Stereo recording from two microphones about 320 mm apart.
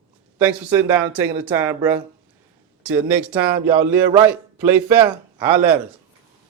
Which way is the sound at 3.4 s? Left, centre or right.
Right.